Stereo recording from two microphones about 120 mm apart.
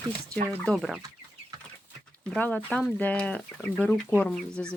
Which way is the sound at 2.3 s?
10° left (ahead or behind).